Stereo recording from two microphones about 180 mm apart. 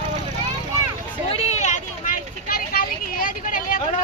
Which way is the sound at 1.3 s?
35° left (ahead or behind).